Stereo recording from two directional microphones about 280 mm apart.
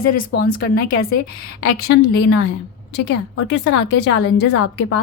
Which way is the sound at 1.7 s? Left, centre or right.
Left.